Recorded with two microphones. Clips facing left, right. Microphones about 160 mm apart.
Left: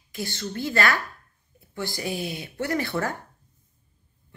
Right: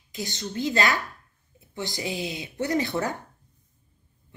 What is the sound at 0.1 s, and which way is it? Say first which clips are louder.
Speech: left 1 dB; 20° right (ahead or behind).